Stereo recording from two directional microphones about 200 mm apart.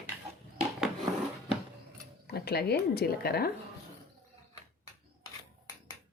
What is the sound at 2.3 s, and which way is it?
Speech, 55° left (ahead or behind).